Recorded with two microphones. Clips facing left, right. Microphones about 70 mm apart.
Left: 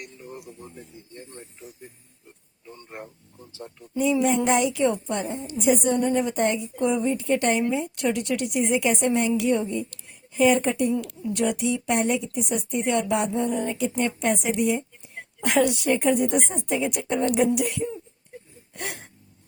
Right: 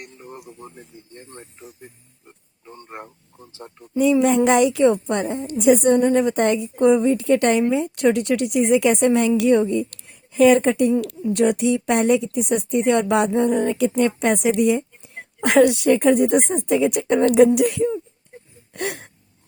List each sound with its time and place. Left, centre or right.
0.0 s radio: right
1.1 s speech: right
3.9 s a woman's voice: right
14.1 s a woman's voice: right
15.1 s speech: right
18.7 s gasp: right